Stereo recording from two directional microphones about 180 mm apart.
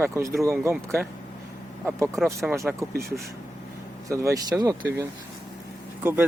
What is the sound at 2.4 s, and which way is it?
Speech, 15° right (ahead or behind).